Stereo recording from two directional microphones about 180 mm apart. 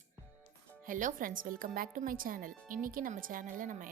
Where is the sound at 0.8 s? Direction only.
45° right (ahead or behind).